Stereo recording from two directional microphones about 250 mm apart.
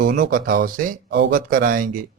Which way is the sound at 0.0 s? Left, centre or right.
Right.